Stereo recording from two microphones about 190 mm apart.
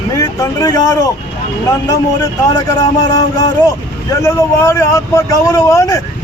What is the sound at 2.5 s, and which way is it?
A man's voice, 20° left (ahead or behind).